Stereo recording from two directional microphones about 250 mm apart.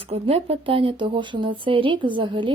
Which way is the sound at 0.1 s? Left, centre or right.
Right.